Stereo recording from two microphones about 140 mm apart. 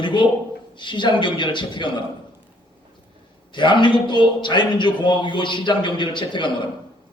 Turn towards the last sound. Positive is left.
turn(degrees=35)  # may be behind; listen again after turning